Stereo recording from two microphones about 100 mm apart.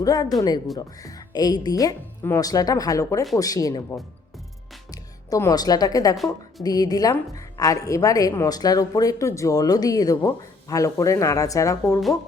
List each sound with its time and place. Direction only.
0.0 s speech: 40° left (ahead or behind)
5.5 s speech: 40° left (ahead or behind)